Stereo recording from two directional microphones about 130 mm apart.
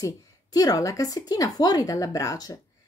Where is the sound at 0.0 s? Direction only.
30° left (ahead or behind).